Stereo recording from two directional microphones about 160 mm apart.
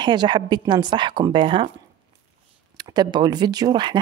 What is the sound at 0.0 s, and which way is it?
Speech, 30° right (ahead or behind).